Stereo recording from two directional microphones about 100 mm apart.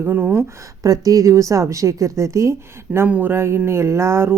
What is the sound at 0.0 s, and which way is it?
Speech, 20° right (ahead or behind).